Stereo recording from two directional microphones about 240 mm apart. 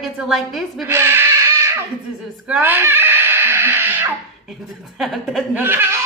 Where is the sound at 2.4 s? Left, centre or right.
Centre.